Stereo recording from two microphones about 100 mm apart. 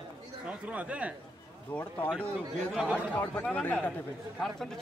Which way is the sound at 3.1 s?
15° left (ahead or behind).